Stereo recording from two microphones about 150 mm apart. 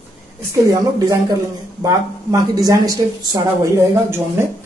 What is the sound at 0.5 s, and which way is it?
A woman's voice, 20° right (ahead or behind).